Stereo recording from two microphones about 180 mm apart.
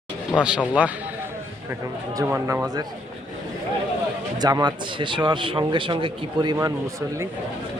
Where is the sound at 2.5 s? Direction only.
20° right (ahead or behind).